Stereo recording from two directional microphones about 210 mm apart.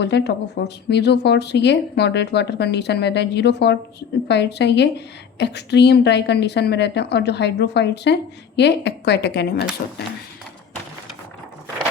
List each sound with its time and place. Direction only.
0.0 s a woman's voice: 55° left (ahead or behind)